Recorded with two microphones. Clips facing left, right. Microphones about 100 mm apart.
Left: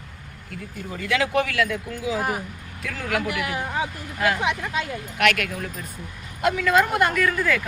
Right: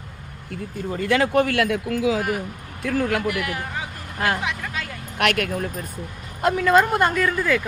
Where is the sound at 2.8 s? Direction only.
40° right (ahead or behind).